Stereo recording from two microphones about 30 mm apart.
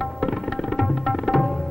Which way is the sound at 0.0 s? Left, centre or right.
Centre.